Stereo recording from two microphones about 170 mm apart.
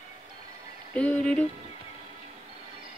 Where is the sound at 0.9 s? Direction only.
5° left (ahead or behind).